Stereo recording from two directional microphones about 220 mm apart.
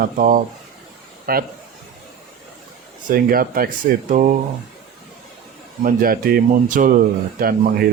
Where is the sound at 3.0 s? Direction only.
40° right (ahead or behind).